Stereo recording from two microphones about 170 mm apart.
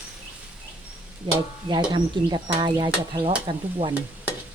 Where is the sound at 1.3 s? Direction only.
25° right (ahead or behind).